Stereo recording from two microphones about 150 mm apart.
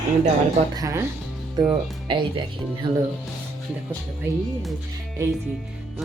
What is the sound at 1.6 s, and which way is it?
Speech, 35° right (ahead or behind).